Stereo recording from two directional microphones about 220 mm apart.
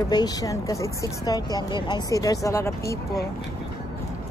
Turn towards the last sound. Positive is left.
turn(degrees=15)  # may be behind; listen again after turning